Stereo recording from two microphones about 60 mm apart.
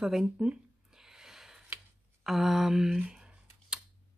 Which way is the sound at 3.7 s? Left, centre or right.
Centre.